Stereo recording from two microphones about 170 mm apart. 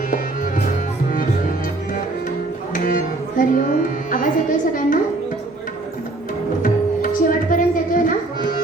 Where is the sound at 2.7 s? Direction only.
55° left (ahead or behind).